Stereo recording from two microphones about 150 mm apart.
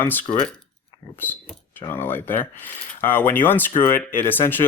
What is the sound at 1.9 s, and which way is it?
Speech, 15° left (ahead or behind).